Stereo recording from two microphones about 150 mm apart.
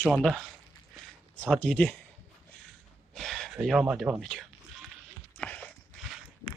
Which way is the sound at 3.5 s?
5° right (ahead or behind).